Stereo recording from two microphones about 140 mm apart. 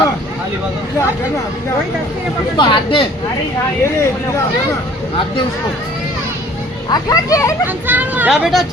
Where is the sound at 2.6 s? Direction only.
35° left (ahead or behind).